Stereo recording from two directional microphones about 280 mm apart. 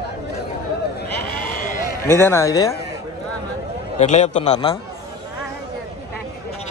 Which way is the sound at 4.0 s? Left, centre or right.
Left.